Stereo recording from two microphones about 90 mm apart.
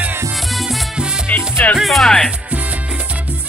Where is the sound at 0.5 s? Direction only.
Centre (ahead or behind).